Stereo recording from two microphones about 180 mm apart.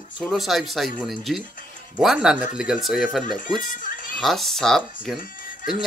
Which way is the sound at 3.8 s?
50° left (ahead or behind).